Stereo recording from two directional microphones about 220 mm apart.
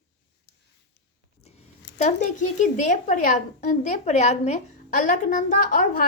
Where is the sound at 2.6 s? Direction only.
35° left (ahead or behind).